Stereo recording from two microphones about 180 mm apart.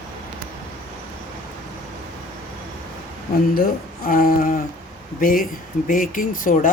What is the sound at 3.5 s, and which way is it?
Speech, 55° left (ahead or behind).